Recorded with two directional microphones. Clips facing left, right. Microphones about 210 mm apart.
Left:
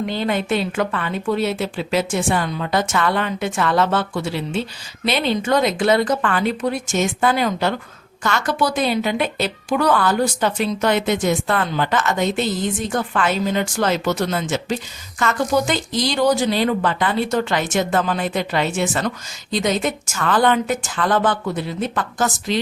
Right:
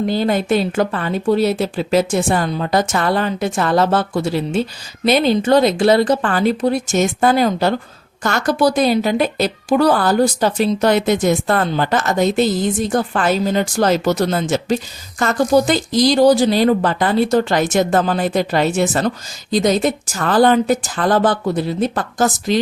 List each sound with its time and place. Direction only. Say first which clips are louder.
0.0 s speech: right 4 dB; 40° right (ahead or behind)